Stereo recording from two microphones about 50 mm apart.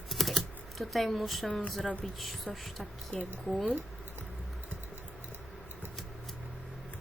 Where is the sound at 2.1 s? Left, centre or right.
Centre.